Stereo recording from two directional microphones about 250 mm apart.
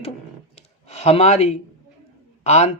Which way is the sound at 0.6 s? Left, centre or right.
Left.